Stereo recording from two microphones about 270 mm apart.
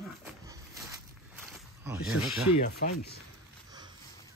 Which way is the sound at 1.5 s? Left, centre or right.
Centre.